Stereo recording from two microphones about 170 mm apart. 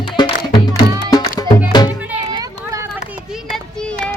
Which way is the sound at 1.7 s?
25° left (ahead or behind).